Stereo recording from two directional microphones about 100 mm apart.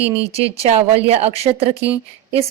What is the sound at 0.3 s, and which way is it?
A woman's voice, 90° right.